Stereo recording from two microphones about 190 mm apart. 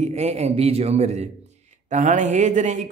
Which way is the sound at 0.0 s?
35° right (ahead or behind).